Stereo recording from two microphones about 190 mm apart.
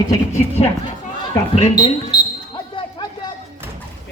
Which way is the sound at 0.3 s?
35° left (ahead or behind).